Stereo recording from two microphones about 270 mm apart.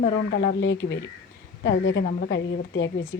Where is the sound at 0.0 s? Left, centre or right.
Left.